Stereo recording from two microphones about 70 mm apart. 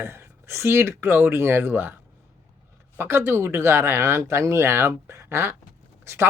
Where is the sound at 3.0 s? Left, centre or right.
Right.